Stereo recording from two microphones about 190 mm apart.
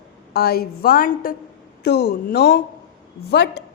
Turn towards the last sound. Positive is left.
turn(degrees=60)  # may be behind; listen again after turning